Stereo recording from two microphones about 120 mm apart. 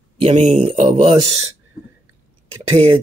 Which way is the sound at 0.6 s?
45° right (ahead or behind).